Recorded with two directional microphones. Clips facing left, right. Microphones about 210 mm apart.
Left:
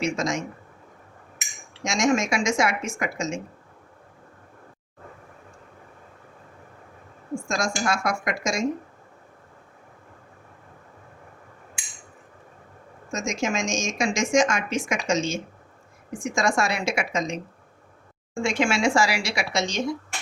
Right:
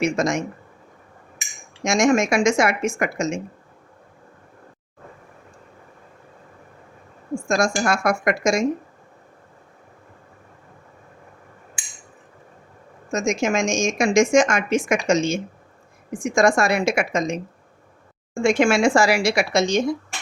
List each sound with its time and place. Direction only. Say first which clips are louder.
0.0 s a woman's voice: right 5 dB; 55° right (ahead or behind)
1.8 s a woman's voice: right 5 dB; 55° right (ahead or behind)
7.4 s a woman's voice: right 6 dB; 55° right (ahead or behind)
13.1 s a woman's voice: right 6 dB; 55° right (ahead or behind)
18.4 s speech: right 6 dB; 50° right (ahead or behind)